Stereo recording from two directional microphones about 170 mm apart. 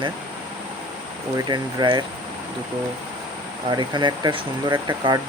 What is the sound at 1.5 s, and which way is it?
Speech, 25° right (ahead or behind).